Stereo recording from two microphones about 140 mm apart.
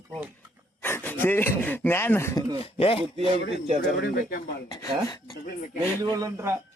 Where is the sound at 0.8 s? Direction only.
15° left (ahead or behind).